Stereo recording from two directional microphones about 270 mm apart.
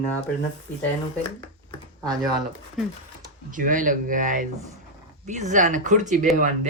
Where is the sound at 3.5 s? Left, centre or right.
Right.